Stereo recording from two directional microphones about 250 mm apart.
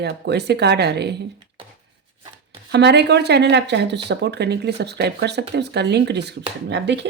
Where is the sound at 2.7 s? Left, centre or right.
Right.